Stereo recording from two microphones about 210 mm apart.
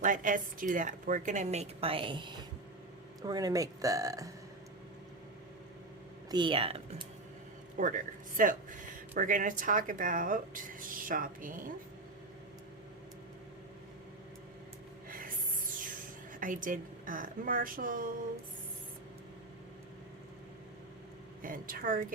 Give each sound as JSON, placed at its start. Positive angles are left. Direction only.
{"t": 0.0, "sound": "speech", "side_deg": -40}
{"t": 6.3, "sound": "speech", "side_deg": -25}
{"t": 7.8, "sound": "speech", "side_deg": -40}
{"t": 16.4, "sound": "speech", "side_deg": -40}
{"t": 21.4, "sound": "speech", "side_deg": -40}